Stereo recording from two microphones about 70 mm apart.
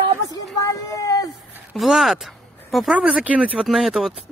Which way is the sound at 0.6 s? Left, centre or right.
Left.